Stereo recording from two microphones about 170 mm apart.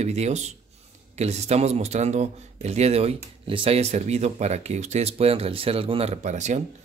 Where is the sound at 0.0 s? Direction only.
40° right (ahead or behind).